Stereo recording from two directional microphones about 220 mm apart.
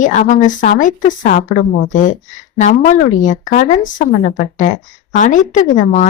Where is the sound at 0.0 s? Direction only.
35° left (ahead or behind).